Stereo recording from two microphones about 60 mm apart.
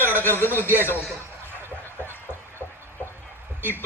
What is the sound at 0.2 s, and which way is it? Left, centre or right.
Speech, left.